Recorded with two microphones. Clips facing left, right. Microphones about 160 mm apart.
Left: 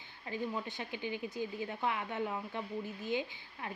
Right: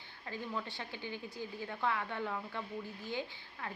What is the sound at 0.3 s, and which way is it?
Speech, 20° left (ahead or behind).